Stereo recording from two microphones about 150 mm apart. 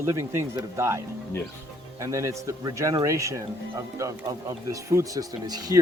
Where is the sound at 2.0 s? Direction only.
20° right (ahead or behind).